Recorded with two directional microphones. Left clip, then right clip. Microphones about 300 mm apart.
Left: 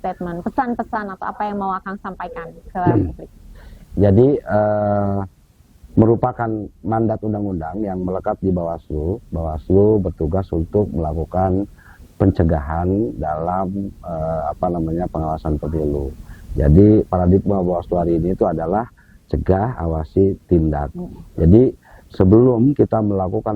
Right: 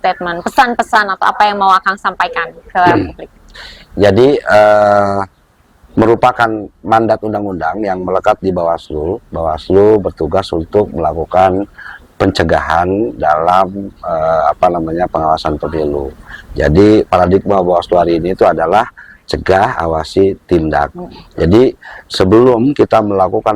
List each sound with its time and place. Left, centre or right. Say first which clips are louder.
0.0 s a man's voice: right 11 dB; centre
4.4 s speech: right 11 dB; centre
4.8 s a man's voice: right 11 dB; centre
16.6 s a man's voice: right 6 dB; centre
18.0 s a man's voice: right 8 dB; centre
22.3 s a man's voice: right 5 dB; right